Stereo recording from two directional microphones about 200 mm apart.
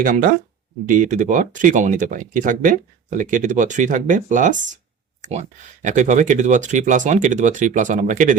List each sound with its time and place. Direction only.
0.0 s speech: 40° right (ahead or behind)